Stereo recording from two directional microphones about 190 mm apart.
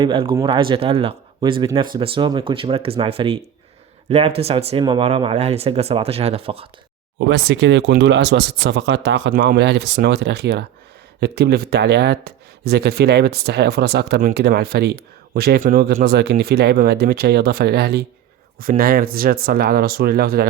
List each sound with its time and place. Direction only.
0.0 s speech: 25° right (ahead or behind)
7.2 s speech: 65° right (ahead or behind)